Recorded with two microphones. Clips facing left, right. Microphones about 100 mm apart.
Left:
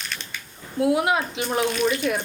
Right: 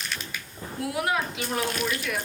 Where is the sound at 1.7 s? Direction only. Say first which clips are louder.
Left 7 dB; centre (ahead or behind).